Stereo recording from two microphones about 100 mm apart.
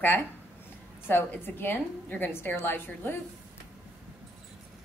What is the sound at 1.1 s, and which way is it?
A woman's voice, 20° left (ahead or behind).